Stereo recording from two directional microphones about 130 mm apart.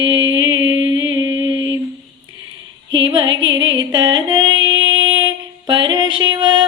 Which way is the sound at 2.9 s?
35° right (ahead or behind).